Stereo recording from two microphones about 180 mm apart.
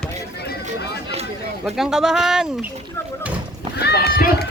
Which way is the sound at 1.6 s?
5° right (ahead or behind).